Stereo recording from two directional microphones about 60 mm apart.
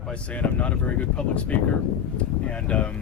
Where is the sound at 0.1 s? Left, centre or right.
Left.